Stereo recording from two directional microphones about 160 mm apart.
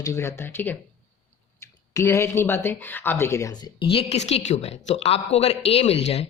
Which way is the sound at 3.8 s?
35° left (ahead or behind).